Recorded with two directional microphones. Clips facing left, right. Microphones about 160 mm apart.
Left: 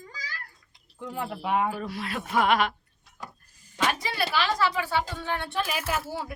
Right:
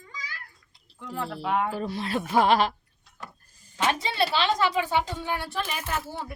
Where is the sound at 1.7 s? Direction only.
30° right (ahead or behind).